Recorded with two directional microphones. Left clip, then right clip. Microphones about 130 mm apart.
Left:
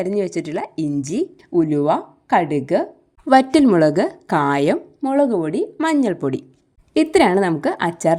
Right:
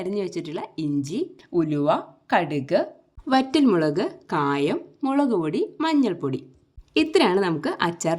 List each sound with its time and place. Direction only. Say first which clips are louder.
0.0 s a woman's voice: left 7 dB; 35° left (ahead or behind)
1.0 s speech: left 6 dB; 45° left (ahead or behind)
1.5 s a woman's voice: left 5 dB; 25° left (ahead or behind); by 4.8 s 50° left (ahead or behind)
4.9 s a woman's voice: left 3 dB; 20° left (ahead or behind)